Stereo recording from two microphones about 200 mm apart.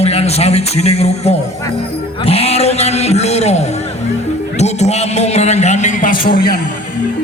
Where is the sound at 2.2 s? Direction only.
30° left (ahead or behind).